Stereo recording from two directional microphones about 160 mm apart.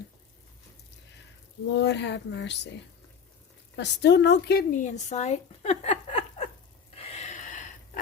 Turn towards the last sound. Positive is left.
turn(degrees=50)  # may be behind; listen again after turning